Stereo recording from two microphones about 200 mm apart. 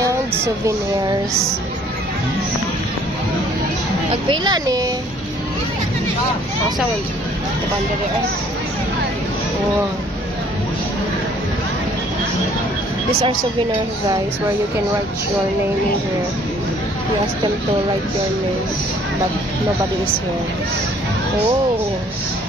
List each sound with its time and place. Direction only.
0.0 s speech: 15° right (ahead or behind)
4.1 s speech: 20° right (ahead or behind)